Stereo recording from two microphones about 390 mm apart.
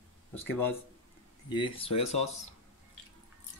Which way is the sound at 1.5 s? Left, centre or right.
Centre.